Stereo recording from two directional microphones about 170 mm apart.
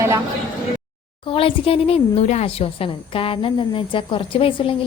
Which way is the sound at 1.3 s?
30° left (ahead or behind).